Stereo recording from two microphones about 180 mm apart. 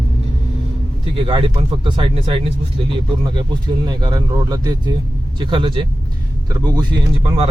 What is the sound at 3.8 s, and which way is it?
Speech, 25° right (ahead or behind).